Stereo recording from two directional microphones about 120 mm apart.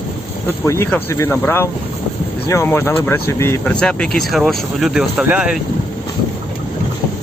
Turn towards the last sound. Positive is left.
turn(degrees=-10)  # may be behind; listen again after turning